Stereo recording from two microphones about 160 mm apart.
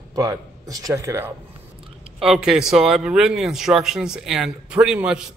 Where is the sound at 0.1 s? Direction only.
20° right (ahead or behind).